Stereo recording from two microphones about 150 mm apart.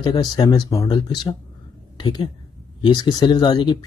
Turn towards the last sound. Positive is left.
turn(degrees=30)  # may be behind; listen again after turning